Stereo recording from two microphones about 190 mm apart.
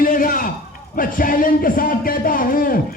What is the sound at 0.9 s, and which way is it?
Music, 45° left (ahead or behind).